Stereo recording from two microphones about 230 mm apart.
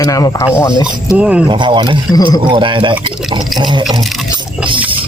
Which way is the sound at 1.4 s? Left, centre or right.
Right.